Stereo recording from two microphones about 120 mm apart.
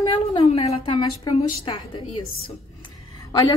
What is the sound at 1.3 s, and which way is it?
Speech, 35° left (ahead or behind).